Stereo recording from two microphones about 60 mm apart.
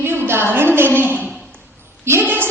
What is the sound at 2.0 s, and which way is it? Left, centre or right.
Speech, right.